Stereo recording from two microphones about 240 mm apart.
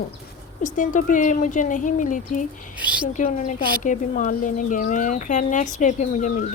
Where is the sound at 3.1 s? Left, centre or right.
Left.